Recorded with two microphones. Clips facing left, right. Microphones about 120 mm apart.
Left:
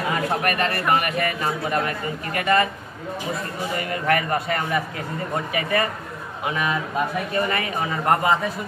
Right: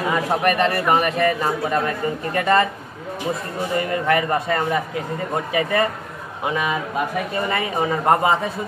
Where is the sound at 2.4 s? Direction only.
30° right (ahead or behind).